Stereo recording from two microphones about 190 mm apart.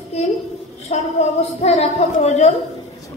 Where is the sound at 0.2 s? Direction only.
35° left (ahead or behind).